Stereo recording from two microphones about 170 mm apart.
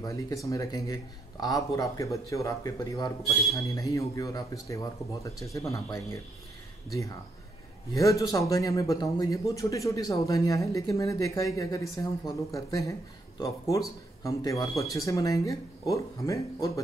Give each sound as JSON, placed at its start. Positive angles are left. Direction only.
{"t": 0.0, "sound": "a man's voice", "side_deg": 20}
{"t": 7.9, "sound": "a man's voice", "side_deg": 20}